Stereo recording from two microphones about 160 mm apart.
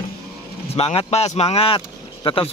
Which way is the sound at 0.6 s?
40° left (ahead or behind).